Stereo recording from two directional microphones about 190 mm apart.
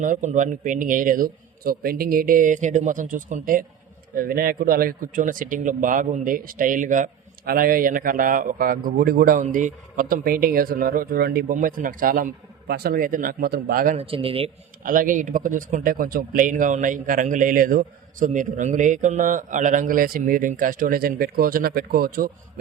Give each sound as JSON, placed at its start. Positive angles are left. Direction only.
{"t": 0.0, "sound": "speech", "side_deg": -40}
{"t": 13.9, "sound": "speech", "side_deg": -30}
{"t": 14.8, "sound": "speech", "side_deg": -45}